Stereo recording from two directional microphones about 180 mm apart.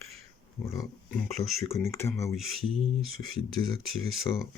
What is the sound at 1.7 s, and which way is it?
Speech, 15° left (ahead or behind).